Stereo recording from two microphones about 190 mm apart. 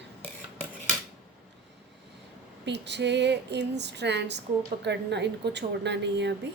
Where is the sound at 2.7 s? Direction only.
65° right (ahead or behind).